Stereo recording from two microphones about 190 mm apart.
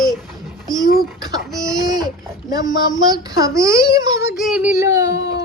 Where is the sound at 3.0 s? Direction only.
20° right (ahead or behind).